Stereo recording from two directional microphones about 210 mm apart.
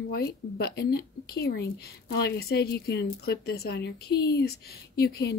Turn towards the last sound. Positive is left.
turn(degrees=50)  # may be behind; listen again after turning